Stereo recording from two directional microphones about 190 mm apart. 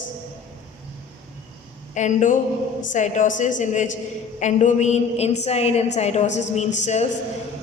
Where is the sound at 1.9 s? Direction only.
40° left (ahead or behind).